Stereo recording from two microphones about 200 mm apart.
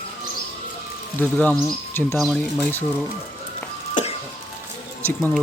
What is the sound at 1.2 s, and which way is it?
Speech, 5° left (ahead or behind).